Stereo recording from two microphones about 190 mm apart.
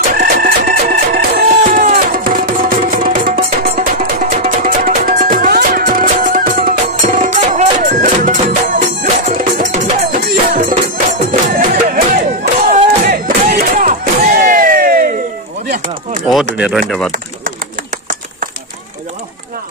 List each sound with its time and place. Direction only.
0.1 s music: 50° right (ahead or behind)
16.5 s speech: 5° right (ahead or behind)